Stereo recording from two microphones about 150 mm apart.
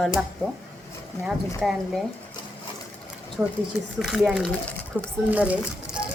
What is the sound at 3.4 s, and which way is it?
A child's voice, 10° right (ahead or behind).